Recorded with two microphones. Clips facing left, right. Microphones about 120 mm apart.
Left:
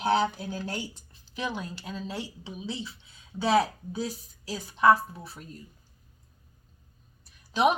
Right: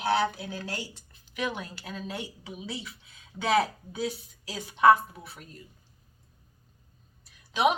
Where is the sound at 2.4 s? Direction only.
30° left (ahead or behind).